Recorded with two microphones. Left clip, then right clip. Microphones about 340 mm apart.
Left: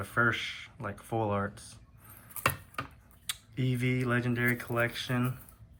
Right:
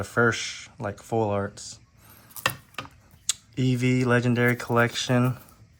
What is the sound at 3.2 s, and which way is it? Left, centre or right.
Speech, centre.